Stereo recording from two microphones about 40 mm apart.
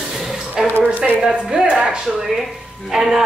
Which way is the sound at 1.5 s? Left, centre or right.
Centre.